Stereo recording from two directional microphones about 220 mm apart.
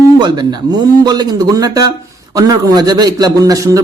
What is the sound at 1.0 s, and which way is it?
A man's voice, 20° right (ahead or behind).